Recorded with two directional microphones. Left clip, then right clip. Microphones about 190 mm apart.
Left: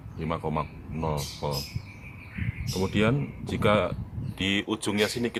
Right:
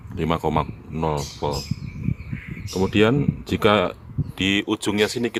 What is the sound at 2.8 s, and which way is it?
Speech, 40° right (ahead or behind).